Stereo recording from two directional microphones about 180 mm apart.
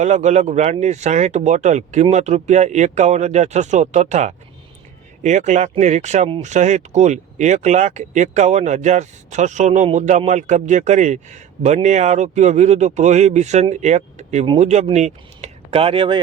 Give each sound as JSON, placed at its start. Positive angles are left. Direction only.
{"t": 0.0, "sound": "speech", "side_deg": -40}